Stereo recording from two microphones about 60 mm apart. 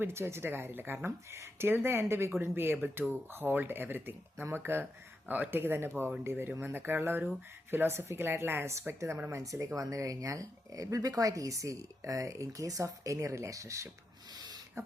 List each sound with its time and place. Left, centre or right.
0.0 s speech: right
14.8 s beatboxing: right